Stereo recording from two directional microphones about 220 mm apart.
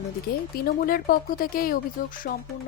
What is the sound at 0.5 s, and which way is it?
Speech, 40° left (ahead or behind).